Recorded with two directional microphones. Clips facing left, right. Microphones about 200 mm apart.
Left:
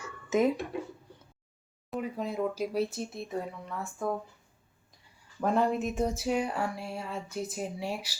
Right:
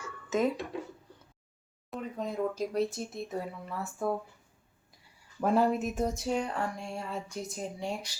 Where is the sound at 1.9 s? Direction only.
10° left (ahead or behind).